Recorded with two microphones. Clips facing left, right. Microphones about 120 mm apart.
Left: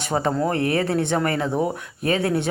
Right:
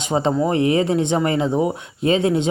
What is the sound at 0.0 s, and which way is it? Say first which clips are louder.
Speech: right 3 dB; 20° right (ahead or behind).